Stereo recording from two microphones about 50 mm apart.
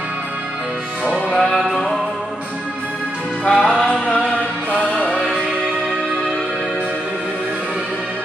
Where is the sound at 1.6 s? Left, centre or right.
Centre.